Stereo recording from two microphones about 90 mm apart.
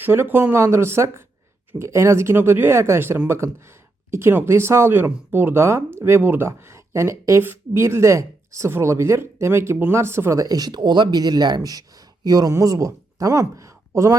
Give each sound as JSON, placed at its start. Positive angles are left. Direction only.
{"t": 0.0, "sound": "speech", "side_deg": -25}
{"t": 10.4, "sound": "speech", "side_deg": -45}